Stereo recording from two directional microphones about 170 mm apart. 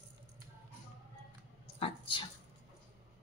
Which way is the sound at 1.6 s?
30° left (ahead or behind).